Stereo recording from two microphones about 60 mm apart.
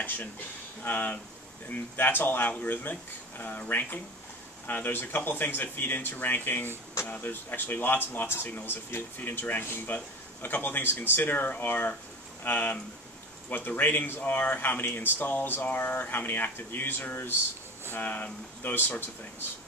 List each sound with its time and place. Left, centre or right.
0.8 s speech: left